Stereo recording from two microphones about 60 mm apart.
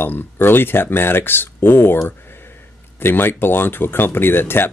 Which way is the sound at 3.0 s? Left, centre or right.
Left.